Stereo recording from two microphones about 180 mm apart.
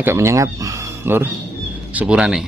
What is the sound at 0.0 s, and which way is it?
A man's voice, 15° right (ahead or behind).